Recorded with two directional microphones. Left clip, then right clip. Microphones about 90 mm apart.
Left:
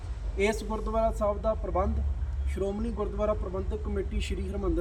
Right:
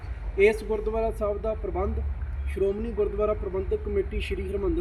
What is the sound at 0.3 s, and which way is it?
A man's voice, 50° left (ahead or behind).